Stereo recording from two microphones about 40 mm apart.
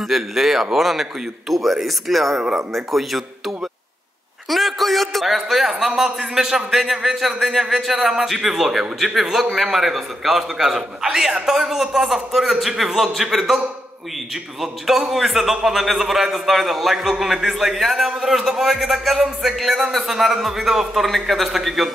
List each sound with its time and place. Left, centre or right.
0.0 s a man's voice: centre
18.0 s a man's voice: centre
18.3 s a man's voice: centre